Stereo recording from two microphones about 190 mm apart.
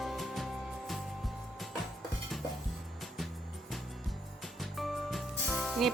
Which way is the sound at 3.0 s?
Centre (ahead or behind).